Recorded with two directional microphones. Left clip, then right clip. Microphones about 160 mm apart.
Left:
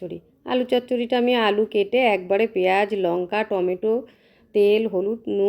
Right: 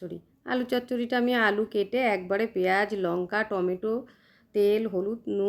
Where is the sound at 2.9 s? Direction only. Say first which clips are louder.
Left 5 dB; 5° left (ahead or behind).